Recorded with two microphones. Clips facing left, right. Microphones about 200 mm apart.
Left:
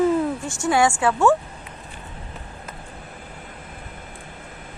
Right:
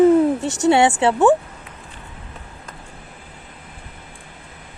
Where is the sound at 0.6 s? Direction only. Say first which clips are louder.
Right 4 dB; 20° right (ahead or behind).